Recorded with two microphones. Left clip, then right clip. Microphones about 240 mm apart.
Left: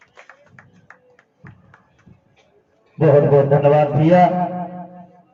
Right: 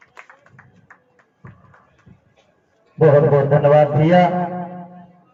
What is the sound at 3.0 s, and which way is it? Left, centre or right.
A man's voice, right.